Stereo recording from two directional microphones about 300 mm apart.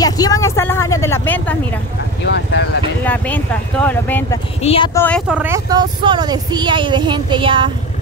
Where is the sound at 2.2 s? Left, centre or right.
Left.